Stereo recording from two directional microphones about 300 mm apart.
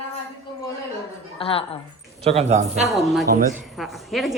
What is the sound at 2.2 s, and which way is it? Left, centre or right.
Speech, right.